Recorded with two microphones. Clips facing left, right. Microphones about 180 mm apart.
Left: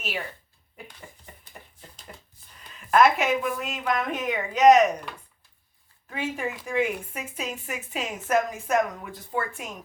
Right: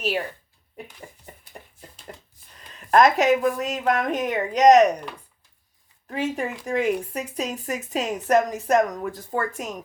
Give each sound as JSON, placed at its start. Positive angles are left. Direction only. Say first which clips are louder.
{"t": 2.9, "sound": "speech", "louder": "right 3 dB", "side_deg": -40}
{"t": 6.1, "sound": "speech", "louder": "right 4 dB", "side_deg": -40}